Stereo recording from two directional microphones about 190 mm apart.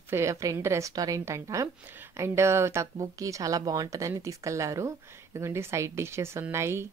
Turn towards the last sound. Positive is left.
turn(degrees=-15)  # may be behind; listen again after turning